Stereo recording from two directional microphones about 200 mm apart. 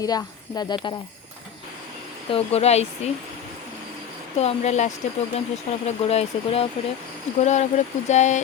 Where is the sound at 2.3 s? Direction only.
30° left (ahead or behind).